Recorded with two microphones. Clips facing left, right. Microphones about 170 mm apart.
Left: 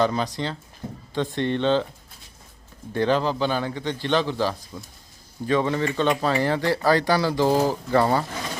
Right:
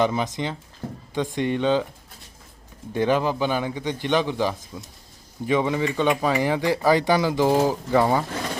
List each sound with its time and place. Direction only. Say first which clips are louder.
0.0 s speech: even; 15° right (ahead or behind)
2.9 s speech: even; 15° right (ahead or behind)